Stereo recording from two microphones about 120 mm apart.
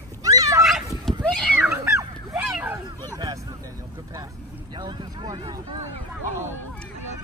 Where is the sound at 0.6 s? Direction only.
Centre (ahead or behind).